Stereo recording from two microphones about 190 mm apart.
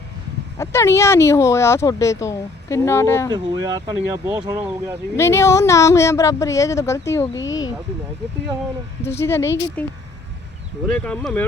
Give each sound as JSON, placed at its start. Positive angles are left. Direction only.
{"t": 0.6, "sound": "speech", "side_deg": 15}
{"t": 3.3, "sound": "speech", "side_deg": -20}
{"t": 5.1, "sound": "speech", "side_deg": 15}
{"t": 7.3, "sound": "speech", "side_deg": 80}
{"t": 9.0, "sound": "speech", "side_deg": 15}
{"t": 10.8, "sound": "speech", "side_deg": 5}